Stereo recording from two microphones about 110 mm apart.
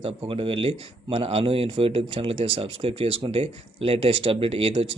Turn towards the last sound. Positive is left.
turn(degrees=-55)  # may be behind; listen again after turning